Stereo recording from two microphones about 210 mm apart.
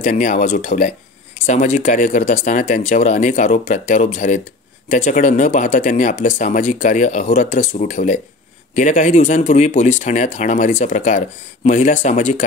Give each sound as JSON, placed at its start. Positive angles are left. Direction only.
{"t": 0.0, "sound": "speech", "side_deg": 40}